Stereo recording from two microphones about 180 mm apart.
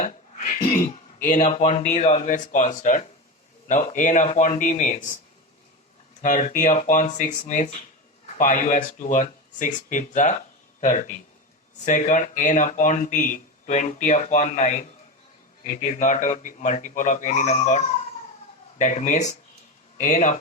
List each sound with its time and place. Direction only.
0.0 s speech: 45° left (ahead or behind)
6.2 s speech: 45° left (ahead or behind)